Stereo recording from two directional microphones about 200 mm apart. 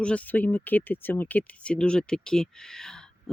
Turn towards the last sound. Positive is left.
turn(degrees=5)  # may be behind; listen again after turning